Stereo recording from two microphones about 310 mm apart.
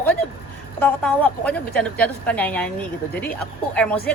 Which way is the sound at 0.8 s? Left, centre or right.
Centre.